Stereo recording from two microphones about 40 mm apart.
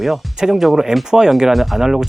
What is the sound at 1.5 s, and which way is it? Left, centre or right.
Speech, centre.